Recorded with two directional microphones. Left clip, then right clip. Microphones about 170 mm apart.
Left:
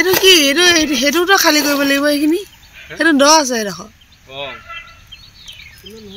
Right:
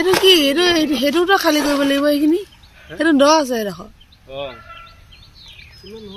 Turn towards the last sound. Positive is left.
turn(degrees=-65)  # may be behind; listen again after turning